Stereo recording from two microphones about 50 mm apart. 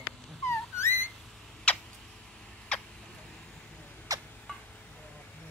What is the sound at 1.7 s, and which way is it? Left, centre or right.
Tick-tock, left.